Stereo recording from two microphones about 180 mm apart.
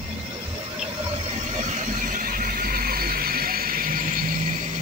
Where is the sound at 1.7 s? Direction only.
45° right (ahead or behind).